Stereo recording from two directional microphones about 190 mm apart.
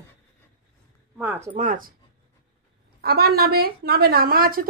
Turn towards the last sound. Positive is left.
turn(degrees=-50)  # may be behind; listen again after turning